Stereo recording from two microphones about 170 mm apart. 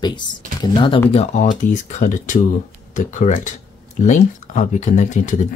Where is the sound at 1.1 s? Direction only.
40° left (ahead or behind).